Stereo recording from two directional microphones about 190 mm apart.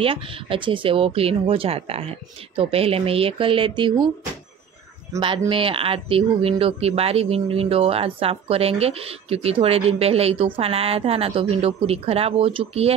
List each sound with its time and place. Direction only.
0.0 s speech: 30° right (ahead or behind)
5.5 s speech: 30° right (ahead or behind)